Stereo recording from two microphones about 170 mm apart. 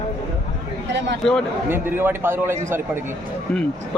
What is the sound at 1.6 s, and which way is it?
A man's voice, 15° right (ahead or behind).